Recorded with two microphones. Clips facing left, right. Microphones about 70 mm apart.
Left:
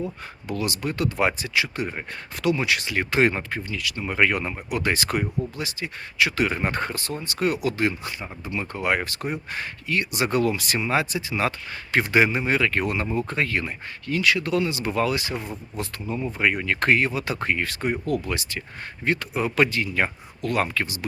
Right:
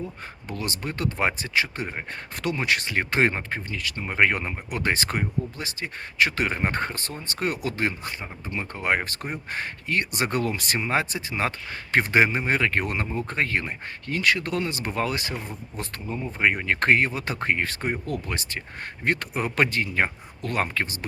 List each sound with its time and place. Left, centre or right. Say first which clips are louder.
0.4 s speech: left 4 dB; right
16.4 s speech: right 1 dB; right